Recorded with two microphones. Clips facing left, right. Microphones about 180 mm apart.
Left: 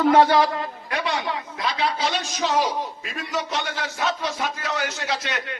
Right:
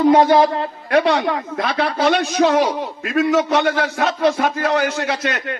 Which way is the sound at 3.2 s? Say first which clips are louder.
Right 12 dB; 70° right (ahead or behind).